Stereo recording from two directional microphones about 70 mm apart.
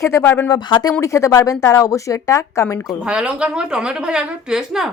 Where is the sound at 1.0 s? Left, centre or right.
Left.